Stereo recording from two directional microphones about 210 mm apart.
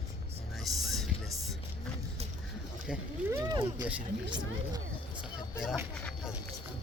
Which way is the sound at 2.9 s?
Centre (ahead or behind).